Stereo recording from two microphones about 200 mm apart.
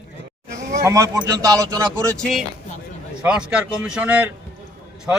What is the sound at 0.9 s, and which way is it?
A man's voice, 15° right (ahead or behind).